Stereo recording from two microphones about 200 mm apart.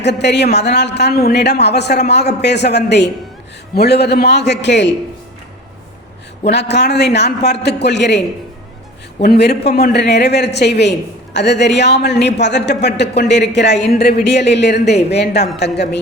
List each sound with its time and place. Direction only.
0.0 s speech: 60° left (ahead or behind)
6.4 s speech: 60° left (ahead or behind)
9.2 s a man's voice: 50° left (ahead or behind)